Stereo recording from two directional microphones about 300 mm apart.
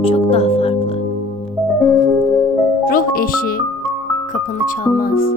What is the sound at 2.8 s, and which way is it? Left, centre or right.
Music, left.